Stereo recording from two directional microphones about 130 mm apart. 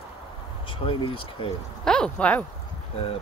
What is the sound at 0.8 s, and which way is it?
Speech, 45° left (ahead or behind).